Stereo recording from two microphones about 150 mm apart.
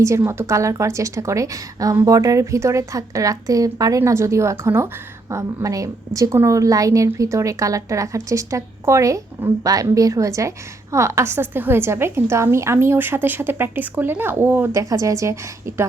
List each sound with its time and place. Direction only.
0.0 s a woman's voice: 20° right (ahead or behind)